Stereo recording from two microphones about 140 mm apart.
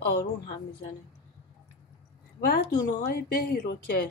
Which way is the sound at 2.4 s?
90° left.